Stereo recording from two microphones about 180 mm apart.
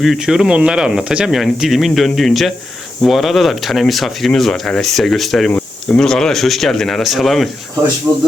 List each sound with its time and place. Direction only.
0.0 s speech: centre (ahead or behind)
8.1 s a man's voice: 10° right (ahead or behind)